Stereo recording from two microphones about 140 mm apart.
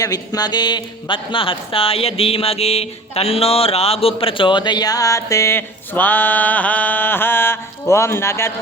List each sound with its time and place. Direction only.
0.0 s speech: 25° left (ahead or behind)